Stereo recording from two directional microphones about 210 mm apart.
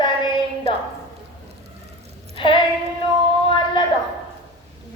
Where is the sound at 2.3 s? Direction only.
25° left (ahead or behind).